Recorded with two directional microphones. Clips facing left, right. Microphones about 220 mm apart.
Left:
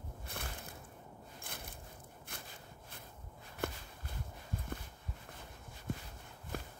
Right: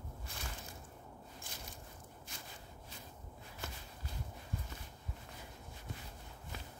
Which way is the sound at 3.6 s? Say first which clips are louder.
Left 10 dB; 55° left (ahead or behind).